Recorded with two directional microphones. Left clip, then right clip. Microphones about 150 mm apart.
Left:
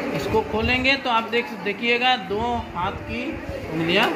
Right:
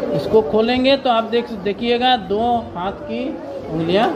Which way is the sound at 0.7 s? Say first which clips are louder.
Right 5 dB; 90° right.